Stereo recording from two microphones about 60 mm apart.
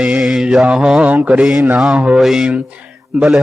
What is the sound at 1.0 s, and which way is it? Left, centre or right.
Speech, right.